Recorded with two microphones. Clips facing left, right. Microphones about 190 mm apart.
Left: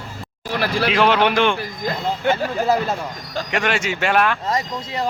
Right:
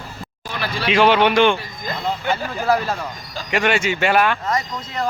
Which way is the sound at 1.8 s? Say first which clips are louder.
Left 4 dB; 75° left (ahead or behind).